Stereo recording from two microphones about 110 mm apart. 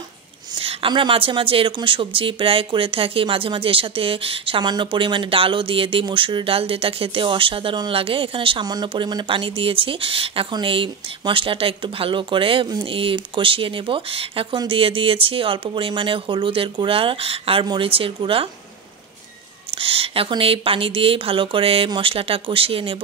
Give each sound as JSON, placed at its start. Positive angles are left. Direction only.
{"t": 0.6, "sound": "speech", "side_deg": -55}
{"t": 19.7, "sound": "speech", "side_deg": -60}